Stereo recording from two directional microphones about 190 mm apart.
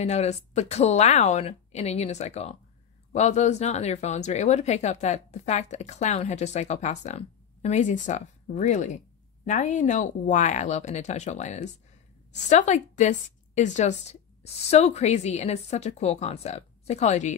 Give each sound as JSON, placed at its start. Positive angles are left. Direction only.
{"t": 0.0, "sound": "speech", "side_deg": 35}